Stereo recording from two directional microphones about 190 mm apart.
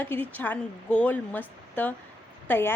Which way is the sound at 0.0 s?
10° left (ahead or behind).